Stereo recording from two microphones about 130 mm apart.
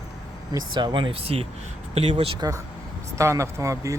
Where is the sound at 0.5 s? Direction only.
35° right (ahead or behind).